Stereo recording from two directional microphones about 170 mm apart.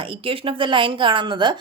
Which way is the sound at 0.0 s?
30° right (ahead or behind).